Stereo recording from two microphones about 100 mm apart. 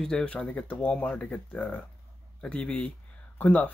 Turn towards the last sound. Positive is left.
turn(degrees=15)  # may be behind; listen again after turning